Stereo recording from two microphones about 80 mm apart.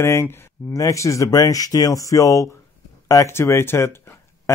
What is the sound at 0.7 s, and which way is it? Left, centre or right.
Speech, left.